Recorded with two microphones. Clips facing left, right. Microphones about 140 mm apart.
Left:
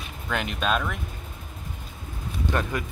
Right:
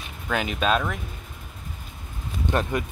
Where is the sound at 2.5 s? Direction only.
20° right (ahead or behind).